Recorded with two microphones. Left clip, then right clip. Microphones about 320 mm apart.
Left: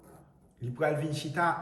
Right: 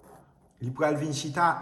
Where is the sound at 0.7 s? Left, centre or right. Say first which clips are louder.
Right 3 dB; centre.